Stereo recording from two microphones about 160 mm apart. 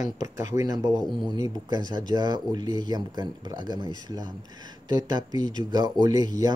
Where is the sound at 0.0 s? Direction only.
50° left (ahead or behind).